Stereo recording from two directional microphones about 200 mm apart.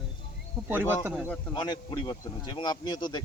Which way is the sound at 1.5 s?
20° left (ahead or behind).